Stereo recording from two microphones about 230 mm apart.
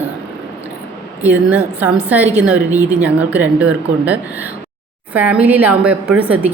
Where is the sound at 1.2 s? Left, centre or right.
Centre.